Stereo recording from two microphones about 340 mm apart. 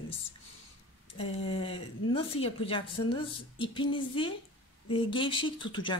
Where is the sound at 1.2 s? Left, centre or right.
Centre.